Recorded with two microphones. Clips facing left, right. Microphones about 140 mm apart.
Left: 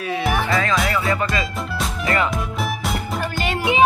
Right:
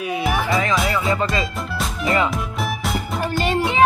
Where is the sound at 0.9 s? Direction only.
20° right (ahead or behind).